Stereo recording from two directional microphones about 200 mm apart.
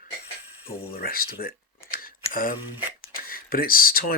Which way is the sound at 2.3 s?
45° left (ahead or behind).